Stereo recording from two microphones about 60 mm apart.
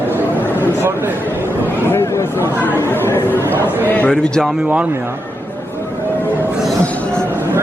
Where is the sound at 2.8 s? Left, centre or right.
Left.